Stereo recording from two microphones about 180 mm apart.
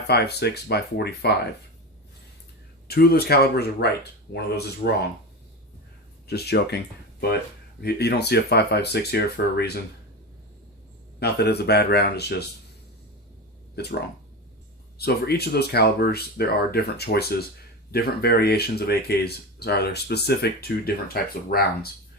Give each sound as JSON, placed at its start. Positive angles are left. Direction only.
{"t": 0.1, "sound": "speech", "side_deg": 65}
{"t": 2.8, "sound": "speech", "side_deg": 60}
{"t": 6.2, "sound": "speech", "side_deg": 65}
{"t": 7.8, "sound": "speech", "side_deg": 65}
{"t": 11.2, "sound": "speech", "side_deg": 65}
{"t": 14.9, "sound": "speech", "side_deg": 60}